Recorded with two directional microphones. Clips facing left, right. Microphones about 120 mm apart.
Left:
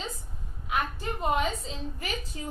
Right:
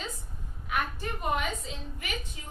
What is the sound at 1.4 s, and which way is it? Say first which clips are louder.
Speech: left 4 dB; 35° left (ahead or behind).